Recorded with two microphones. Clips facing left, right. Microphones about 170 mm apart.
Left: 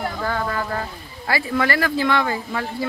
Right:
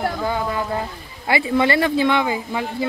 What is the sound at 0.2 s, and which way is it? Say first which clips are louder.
Speech: right 2 dB; 15° right (ahead or behind).